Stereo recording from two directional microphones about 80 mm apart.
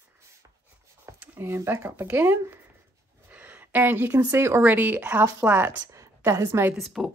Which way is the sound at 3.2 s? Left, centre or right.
Right.